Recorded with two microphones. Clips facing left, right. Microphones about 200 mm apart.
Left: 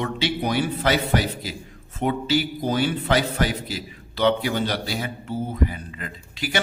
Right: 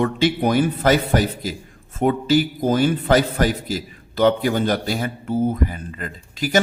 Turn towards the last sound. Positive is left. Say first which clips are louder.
# right 7 dB
turn(degrees=-45)  # may be behind; listen again after turning